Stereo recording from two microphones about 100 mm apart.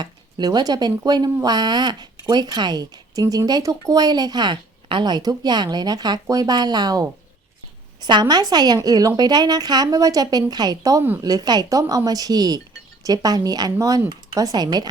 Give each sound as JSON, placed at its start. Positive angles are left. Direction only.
{"t": 0.0, "sound": "speech", "side_deg": -45}